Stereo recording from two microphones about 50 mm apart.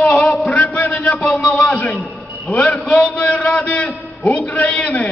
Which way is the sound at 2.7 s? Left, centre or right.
Left.